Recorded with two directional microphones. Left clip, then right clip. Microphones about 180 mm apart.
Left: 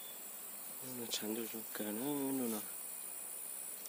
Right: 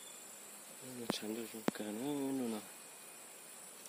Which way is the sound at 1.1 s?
10° left (ahead or behind).